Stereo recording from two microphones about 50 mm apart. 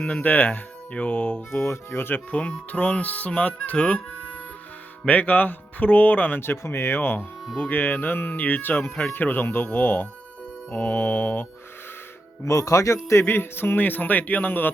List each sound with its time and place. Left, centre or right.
0.0 s a man's voice: left
1.9 s a man's voice: left
2.3 s speech: left
5.0 s a man's voice: left
6.7 s a man's voice: left
12.5 s a man's voice: left
13.2 s a man's voice: left